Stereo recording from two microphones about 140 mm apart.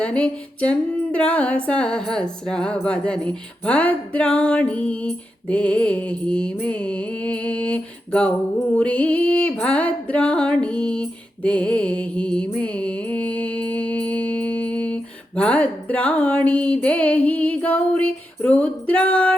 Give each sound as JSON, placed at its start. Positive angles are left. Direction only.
{"t": 0.0, "sound": "music", "side_deg": 10}